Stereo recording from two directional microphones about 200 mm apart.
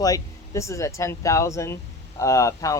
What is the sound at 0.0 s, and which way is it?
Speech, 15° left (ahead or behind).